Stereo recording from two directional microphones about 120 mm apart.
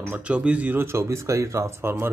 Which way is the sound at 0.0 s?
15° right (ahead or behind).